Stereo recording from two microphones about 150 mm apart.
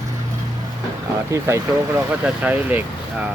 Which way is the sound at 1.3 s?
20° right (ahead or behind).